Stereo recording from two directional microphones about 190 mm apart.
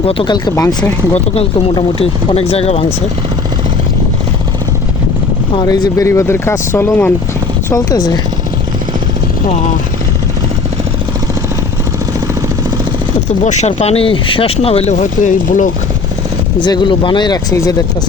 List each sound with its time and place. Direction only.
0.0 s speech: 30° left (ahead or behind)
1.1 s speech: 30° left (ahead or behind)
5.5 s speech: 20° left (ahead or behind)
13.4 s speech: 40° left (ahead or behind)
16.6 s speech: 25° left (ahead or behind)